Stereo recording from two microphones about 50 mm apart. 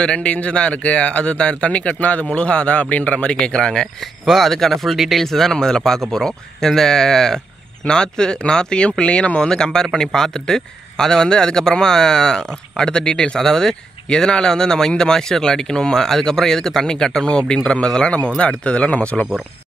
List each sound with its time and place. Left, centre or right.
0.0 s speech: left
4.3 s speech: centre
5.2 s speech: centre